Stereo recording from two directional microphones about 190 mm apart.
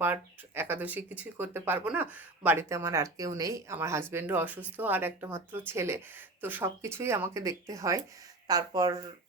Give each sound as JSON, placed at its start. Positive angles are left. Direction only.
{"t": 0.0, "sound": "speech", "side_deg": -10}